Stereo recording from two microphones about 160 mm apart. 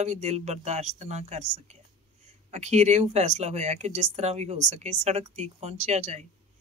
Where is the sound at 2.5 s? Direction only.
45° right (ahead or behind).